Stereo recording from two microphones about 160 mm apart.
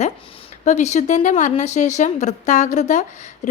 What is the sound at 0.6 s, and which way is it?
A woman's voice, 45° left (ahead or behind).